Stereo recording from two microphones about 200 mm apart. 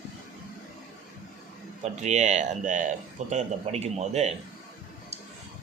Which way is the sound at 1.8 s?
35° right (ahead or behind).